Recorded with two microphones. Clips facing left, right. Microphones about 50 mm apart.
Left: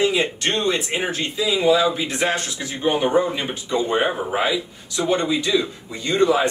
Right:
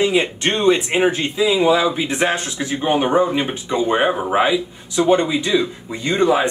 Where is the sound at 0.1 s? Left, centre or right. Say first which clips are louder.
Right 3 dB; right.